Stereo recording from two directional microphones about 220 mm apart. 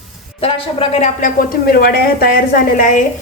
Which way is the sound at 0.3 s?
25° left (ahead or behind).